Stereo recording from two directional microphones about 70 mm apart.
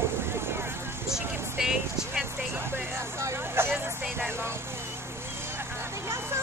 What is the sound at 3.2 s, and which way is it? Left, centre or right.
Vehicle, right.